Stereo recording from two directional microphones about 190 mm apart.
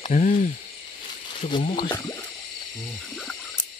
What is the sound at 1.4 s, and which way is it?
Speech, 30° left (ahead or behind).